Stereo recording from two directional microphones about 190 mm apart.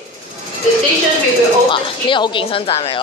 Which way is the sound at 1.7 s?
25° left (ahead or behind).